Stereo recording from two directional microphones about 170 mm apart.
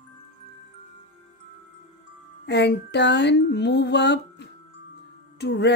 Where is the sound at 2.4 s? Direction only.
90° left.